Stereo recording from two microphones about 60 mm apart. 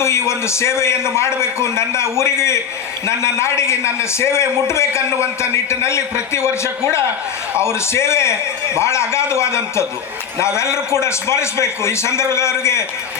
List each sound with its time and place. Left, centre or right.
0.0 s a man's voice: left
11.0 s a man's voice: left